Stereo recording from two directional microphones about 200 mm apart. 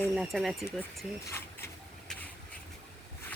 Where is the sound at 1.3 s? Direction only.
10° left (ahead or behind).